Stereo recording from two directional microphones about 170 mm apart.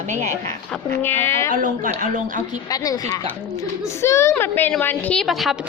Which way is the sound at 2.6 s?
20° left (ahead or behind).